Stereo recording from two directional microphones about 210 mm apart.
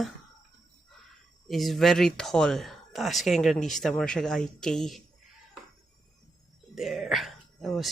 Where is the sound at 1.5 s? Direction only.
Centre (ahead or behind).